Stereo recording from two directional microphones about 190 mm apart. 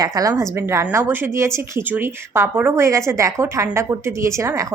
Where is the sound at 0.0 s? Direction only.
20° right (ahead or behind).